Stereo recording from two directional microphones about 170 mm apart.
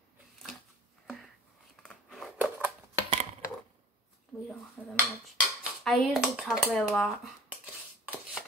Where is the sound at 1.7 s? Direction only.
5° left (ahead or behind).